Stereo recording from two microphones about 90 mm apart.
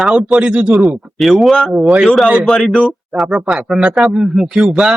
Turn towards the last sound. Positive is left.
turn(degrees=-5)  # may be behind; listen again after turning